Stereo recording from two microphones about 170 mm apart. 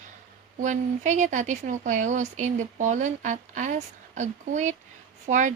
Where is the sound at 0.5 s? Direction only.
45° right (ahead or behind).